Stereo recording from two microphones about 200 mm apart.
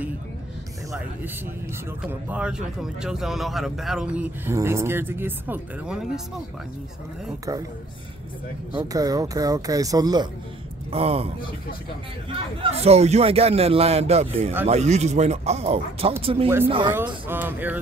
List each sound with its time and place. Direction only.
2.2 s speech: 5° right (ahead or behind)
8.7 s speech: 20° right (ahead or behind)
10.9 s a man's voice: 30° right (ahead or behind)
12.7 s a man's voice: 30° right (ahead or behind)
17.3 s speech: 10° right (ahead or behind)